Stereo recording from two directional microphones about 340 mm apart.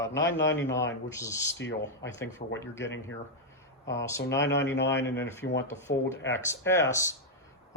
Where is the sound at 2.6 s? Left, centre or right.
Centre.